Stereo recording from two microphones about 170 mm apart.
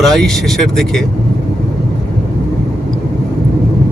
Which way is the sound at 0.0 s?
Centre (ahead or behind).